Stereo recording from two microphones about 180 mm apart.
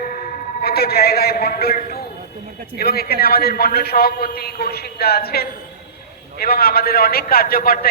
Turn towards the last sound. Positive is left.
turn(degrees=55)  # may be behind; listen again after turning